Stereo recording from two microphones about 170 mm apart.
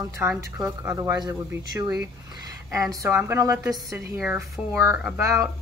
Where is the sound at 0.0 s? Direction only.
15° right (ahead or behind).